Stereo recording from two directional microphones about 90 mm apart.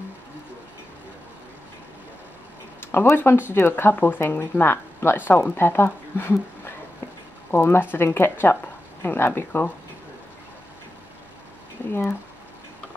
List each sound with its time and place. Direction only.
2.8 s speech: 25° left (ahead or behind)
11.9 s speech: 25° left (ahead or behind)